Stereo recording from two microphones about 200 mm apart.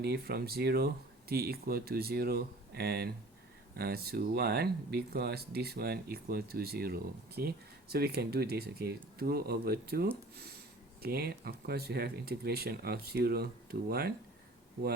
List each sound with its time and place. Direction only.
0.0 s speech: 50° right (ahead or behind)